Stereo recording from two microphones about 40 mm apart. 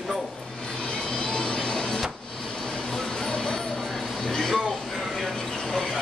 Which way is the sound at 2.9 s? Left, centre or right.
Centre.